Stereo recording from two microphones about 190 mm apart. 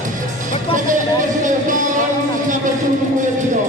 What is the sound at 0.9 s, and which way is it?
Speech, 40° right (ahead or behind).